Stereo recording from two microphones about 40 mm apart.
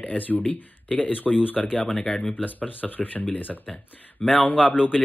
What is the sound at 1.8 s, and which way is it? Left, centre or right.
Speech, centre.